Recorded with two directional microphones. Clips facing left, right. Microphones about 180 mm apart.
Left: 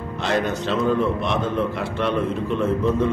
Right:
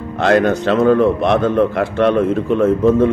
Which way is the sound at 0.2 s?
60° right (ahead or behind).